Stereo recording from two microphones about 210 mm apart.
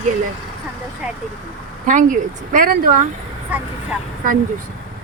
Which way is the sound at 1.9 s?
35° right (ahead or behind).